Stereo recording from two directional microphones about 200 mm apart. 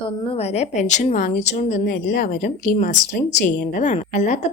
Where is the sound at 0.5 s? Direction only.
35° left (ahead or behind).